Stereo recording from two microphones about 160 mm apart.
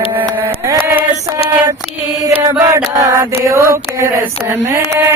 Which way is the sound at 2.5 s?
20° right (ahead or behind).